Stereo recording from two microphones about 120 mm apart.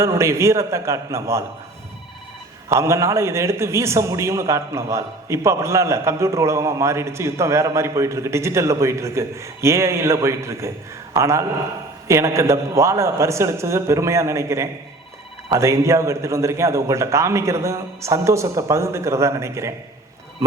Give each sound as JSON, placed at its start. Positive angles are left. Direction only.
{"t": 0.0, "sound": "a man's voice", "side_deg": -25}
{"t": 2.6, "sound": "a man's voice", "side_deg": -25}